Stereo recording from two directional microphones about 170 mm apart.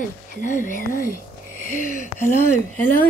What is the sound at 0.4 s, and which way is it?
Speech, 50° left (ahead or behind).